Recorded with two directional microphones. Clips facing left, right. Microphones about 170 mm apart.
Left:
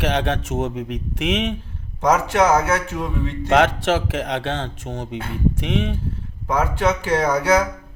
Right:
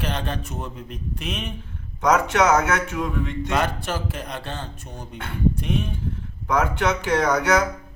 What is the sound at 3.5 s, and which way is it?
Speech, 90° left.